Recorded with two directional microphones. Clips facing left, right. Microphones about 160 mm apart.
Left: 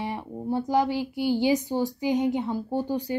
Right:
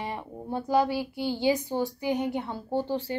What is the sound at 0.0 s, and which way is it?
Speech, 10° left (ahead or behind).